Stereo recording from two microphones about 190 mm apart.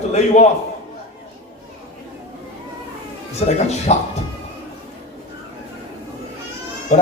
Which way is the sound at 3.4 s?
30° left (ahead or behind).